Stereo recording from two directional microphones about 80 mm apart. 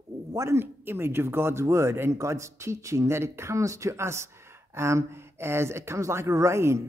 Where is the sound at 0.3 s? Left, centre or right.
Right.